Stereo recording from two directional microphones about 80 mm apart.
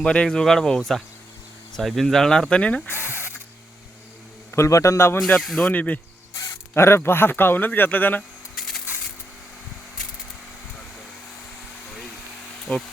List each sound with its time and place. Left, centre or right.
0.0 s speech: centre
2.9 s speech: right
4.5 s a man's voice: left
5.5 s speech: centre
6.7 s speech: left
8.5 s a sound: centre
12.7 s speech: centre